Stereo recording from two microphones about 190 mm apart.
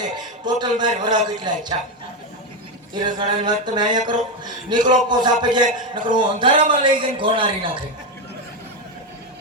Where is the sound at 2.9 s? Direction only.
25° right (ahead or behind).